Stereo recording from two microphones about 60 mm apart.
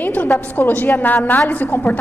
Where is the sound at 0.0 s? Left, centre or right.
Left.